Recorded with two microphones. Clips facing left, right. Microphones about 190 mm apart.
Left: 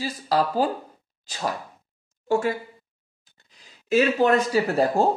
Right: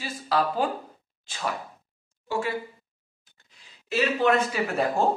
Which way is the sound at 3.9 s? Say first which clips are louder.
Left 4 dB; 45° left (ahead or behind).